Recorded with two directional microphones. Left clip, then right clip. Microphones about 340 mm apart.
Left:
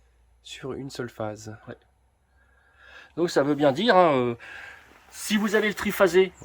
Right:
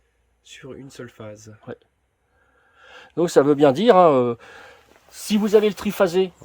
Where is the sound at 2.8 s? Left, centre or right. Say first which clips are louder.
Right 4 dB; right.